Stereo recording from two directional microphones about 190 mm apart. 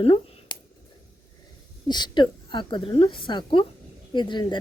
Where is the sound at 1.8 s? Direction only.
25° left (ahead or behind).